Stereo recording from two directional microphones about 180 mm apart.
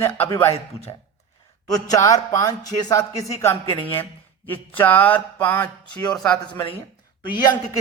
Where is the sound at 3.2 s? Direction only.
15° left (ahead or behind).